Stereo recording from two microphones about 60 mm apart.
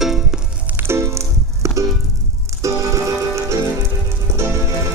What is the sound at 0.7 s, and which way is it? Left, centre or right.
Music, right.